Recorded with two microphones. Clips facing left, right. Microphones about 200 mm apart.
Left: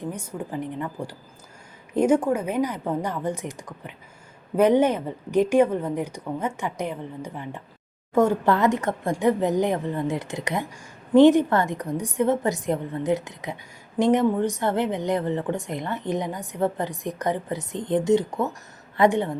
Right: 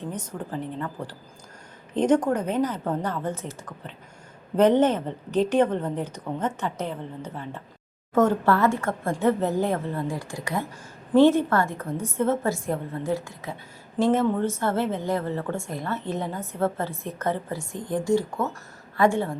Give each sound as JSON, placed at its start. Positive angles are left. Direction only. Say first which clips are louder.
{"t": 0.0, "sound": "a woman's voice", "louder": "left 1 dB", "side_deg": 10}